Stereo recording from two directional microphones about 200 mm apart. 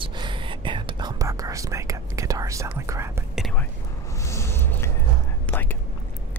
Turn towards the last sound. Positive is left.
turn(degrees=10)  # may be behind; listen again after turning